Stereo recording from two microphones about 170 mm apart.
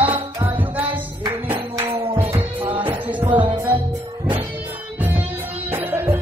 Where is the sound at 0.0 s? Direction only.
10° right (ahead or behind).